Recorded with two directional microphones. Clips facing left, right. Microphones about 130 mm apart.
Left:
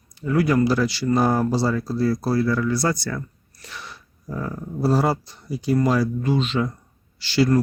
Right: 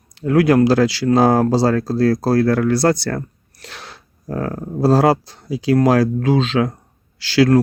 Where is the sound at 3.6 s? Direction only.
85° right; by 4.6 s 70° right (ahead or behind).